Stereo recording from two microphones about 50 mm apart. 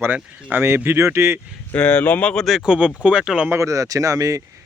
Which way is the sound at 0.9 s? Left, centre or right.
Right.